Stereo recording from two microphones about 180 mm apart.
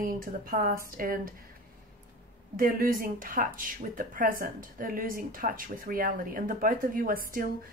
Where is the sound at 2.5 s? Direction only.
50° right (ahead or behind).